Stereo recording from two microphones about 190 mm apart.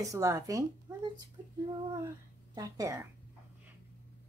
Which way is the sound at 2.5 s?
15° right (ahead or behind).